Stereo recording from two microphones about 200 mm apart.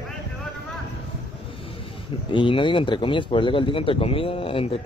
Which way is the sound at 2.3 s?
25° left (ahead or behind).